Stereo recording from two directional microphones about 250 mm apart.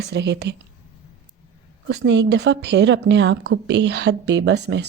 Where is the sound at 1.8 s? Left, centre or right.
Right.